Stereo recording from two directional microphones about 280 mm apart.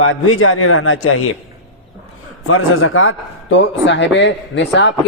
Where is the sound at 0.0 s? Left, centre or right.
Left.